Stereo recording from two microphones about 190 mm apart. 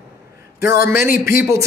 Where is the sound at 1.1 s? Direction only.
50° left (ahead or behind).